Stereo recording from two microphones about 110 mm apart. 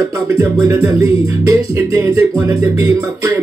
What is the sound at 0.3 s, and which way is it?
Music, 25° right (ahead or behind).